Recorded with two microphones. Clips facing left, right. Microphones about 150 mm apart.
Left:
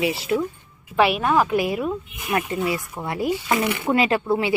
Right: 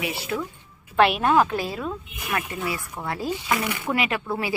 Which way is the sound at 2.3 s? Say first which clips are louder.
Left 5 dB; 25° left (ahead or behind).